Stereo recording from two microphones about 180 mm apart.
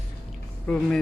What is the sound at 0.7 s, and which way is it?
Speech, 5° left (ahead or behind).